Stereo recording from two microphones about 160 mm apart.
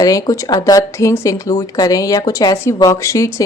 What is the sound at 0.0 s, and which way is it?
Speech, 20° left (ahead or behind).